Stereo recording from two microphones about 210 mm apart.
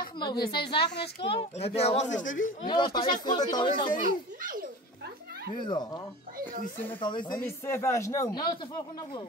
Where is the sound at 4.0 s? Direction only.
40° right (ahead or behind).